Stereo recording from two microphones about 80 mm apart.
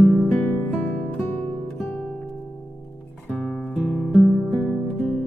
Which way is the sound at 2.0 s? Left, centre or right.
Centre.